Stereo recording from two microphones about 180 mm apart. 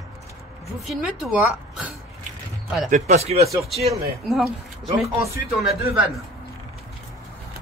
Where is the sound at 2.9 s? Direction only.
40° right (ahead or behind).